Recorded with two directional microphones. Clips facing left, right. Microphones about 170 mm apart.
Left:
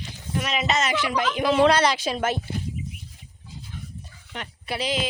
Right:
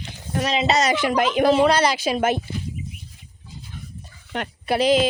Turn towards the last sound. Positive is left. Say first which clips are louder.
# right 10 dB
turn(degrees=-50)  # may be behind; listen again after turning